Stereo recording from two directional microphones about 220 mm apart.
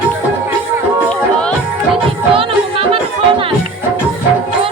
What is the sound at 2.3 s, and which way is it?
Music, 25° right (ahead or behind).